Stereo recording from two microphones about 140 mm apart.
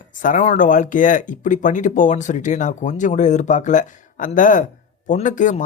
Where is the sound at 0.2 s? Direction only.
70° left (ahead or behind).